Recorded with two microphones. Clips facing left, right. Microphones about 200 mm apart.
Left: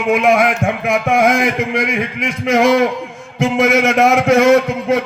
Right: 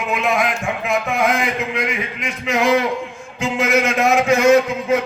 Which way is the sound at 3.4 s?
55° left (ahead or behind).